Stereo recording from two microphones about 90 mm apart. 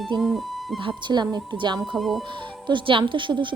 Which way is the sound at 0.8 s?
55° right (ahead or behind).